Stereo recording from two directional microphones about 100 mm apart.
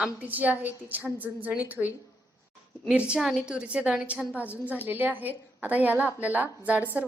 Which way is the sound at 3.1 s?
Centre (ahead or behind).